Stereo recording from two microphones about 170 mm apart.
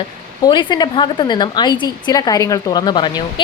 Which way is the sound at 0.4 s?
25° left (ahead or behind).